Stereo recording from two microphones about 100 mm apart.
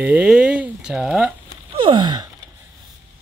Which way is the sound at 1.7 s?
50° right (ahead or behind).